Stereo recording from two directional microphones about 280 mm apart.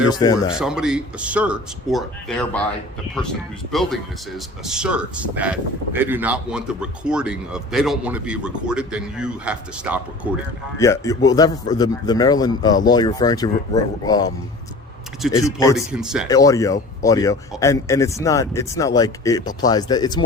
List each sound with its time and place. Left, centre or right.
0.1 s a man's voice: centre
0.6 s a man's voice: centre
10.8 s a man's voice: centre
15.2 s a man's voice: centre
16.3 s a man's voice: centre